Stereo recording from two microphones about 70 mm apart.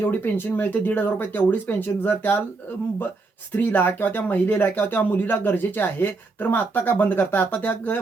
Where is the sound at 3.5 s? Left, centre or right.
Left.